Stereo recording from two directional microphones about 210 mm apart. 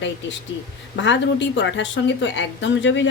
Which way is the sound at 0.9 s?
60° left (ahead or behind).